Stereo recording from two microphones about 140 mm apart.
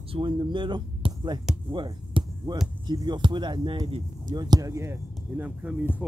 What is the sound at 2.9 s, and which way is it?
Speech, 35° right (ahead or behind).